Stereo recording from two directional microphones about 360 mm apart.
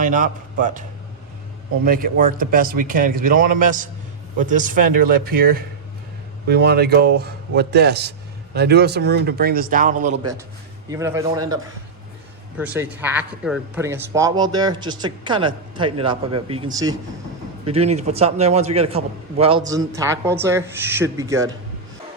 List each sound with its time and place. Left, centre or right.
0.0 s a man's voice: right
10.8 s speech: centre